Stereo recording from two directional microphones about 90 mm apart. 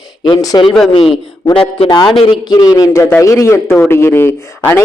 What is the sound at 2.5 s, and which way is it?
A man's voice, 45° left (ahead or behind).